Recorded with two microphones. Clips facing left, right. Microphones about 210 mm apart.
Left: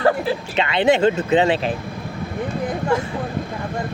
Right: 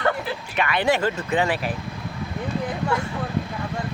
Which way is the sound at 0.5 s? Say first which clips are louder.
Left 4 dB; 25° left (ahead or behind).